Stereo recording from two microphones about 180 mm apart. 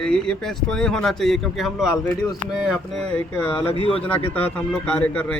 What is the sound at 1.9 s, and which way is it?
Speech, 15° left (ahead or behind).